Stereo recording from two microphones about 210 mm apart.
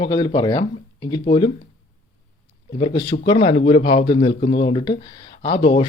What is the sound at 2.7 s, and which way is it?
Speech, 20° left (ahead or behind).